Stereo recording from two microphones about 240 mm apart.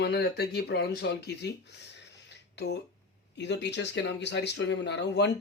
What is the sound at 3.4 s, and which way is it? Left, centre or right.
Speech, left.